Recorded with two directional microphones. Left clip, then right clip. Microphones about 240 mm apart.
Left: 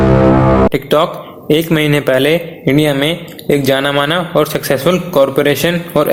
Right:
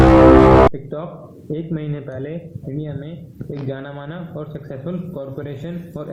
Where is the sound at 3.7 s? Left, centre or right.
Left.